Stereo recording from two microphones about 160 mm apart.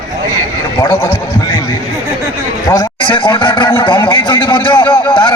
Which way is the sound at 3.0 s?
30° left (ahead or behind).